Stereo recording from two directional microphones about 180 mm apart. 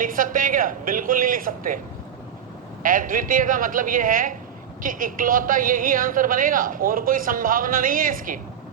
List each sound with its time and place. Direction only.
0.0 s a woman's voice: 50° right (ahead or behind)
2.8 s a woman's voice: 50° right (ahead or behind)